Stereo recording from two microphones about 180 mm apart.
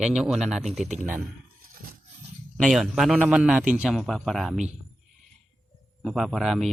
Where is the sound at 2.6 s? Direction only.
Centre (ahead or behind).